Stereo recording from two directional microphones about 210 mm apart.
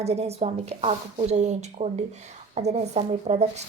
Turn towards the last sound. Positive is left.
turn(degrees=-30)  # may be behind; listen again after turning